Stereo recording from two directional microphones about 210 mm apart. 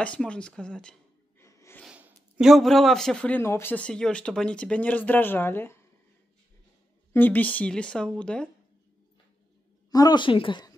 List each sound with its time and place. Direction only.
0.0 s a man's voice: 5° left (ahead or behind)
1.4 s snort: 15° left (ahead or behind)
1.8 s a man's voice: 5° right (ahead or behind); by 5.8 s 10° left (ahead or behind)
7.1 s a man's voice: 10° left (ahead or behind)
9.8 s a woman's voice: 20° left (ahead or behind)